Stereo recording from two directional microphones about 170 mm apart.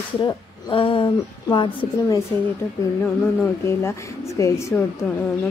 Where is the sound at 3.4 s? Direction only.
15° left (ahead or behind).